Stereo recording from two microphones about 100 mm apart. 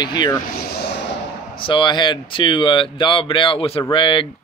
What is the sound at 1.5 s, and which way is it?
Speech, 55° left (ahead or behind).